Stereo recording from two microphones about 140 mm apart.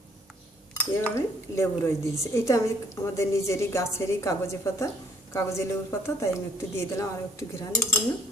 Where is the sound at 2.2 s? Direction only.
20° left (ahead or behind).